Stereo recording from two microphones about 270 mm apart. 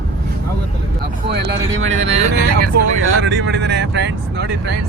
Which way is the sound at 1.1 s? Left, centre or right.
Right.